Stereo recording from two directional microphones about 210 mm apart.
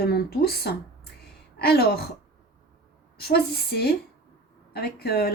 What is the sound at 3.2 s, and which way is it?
Speech, 50° left (ahead or behind).